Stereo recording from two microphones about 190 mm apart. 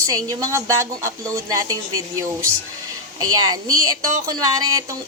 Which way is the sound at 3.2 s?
20° right (ahead or behind).